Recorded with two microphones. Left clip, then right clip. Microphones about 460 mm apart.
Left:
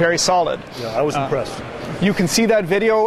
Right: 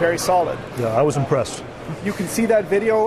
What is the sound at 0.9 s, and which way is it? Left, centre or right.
Speech, right.